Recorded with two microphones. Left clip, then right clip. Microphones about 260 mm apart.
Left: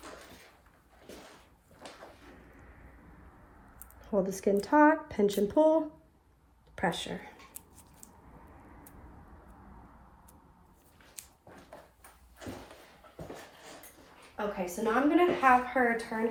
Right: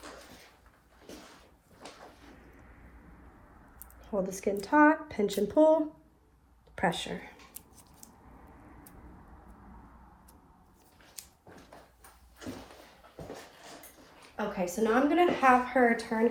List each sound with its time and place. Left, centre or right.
4.0 s a woman's voice: centre
11.2 s a sound: centre
14.3 s a woman's voice: right